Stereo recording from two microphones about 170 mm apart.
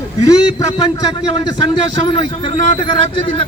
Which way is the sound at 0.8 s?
25° left (ahead or behind).